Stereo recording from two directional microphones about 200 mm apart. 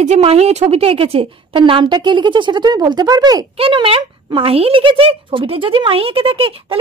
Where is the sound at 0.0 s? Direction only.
35° right (ahead or behind).